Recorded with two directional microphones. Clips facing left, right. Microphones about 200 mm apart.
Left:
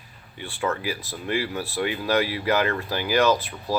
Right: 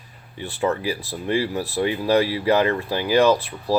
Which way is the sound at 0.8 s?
30° right (ahead or behind).